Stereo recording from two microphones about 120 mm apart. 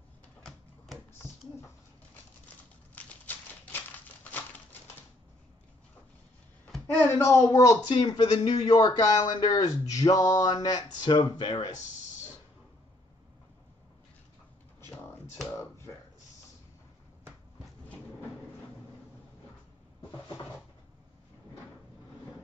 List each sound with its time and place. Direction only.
2.9 s a sound: 15° left (ahead or behind)
7.0 s speech: 20° left (ahead or behind); by 11.7 s 40° left (ahead or behind)
15.5 s finger snapping: 20° left (ahead or behind)